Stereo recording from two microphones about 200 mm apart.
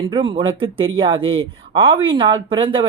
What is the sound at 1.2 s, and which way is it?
Speech, 80° right.